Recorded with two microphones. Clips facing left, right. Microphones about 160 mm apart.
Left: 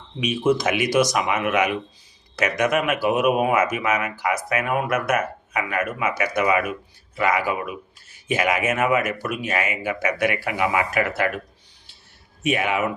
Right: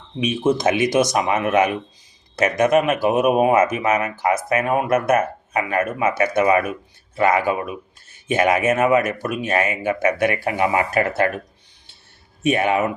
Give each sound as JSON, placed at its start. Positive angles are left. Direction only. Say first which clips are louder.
{"t": 0.2, "sound": "speech", "louder": "right 2 dB", "side_deg": -25}
{"t": 12.4, "sound": "speech", "louder": "right 4 dB", "side_deg": -30}